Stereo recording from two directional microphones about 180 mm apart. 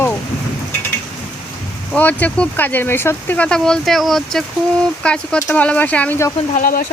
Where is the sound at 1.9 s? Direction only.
10° left (ahead or behind).